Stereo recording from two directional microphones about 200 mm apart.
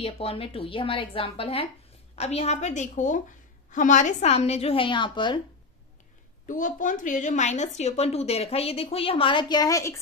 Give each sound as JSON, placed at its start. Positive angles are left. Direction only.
{"t": 0.0, "sound": "a woman's voice", "side_deg": 30}
{"t": 6.4, "sound": "a woman's voice", "side_deg": 40}